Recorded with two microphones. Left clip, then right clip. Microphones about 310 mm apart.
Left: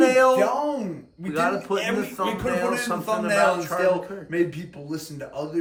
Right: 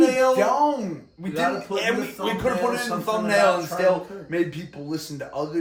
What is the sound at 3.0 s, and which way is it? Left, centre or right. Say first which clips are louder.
Speech: right 1 dB; centre.